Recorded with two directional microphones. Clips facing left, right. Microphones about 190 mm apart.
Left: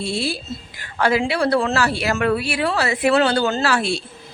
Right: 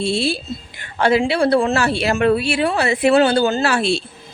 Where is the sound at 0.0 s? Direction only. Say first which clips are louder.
Right 4 dB; 25° right (ahead or behind).